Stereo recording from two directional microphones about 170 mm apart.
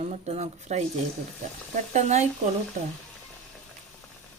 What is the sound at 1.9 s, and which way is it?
Speech, 40° right (ahead or behind).